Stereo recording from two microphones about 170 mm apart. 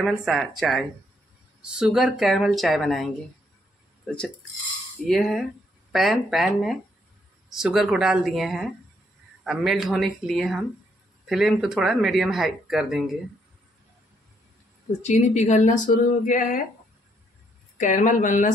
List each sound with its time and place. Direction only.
0.0 s speech: centre (ahead or behind)
15.0 s speech: 45° left (ahead or behind)
17.7 s speech: 50° left (ahead or behind)